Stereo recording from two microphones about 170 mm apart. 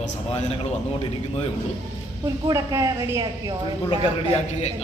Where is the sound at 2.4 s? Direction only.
20° right (ahead or behind).